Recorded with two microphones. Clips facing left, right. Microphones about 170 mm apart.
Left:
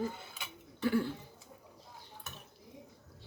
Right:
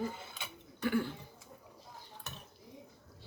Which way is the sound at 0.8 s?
30° left (ahead or behind).